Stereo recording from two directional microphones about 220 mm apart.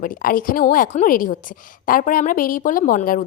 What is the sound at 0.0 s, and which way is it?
A woman's voice, 40° left (ahead or behind).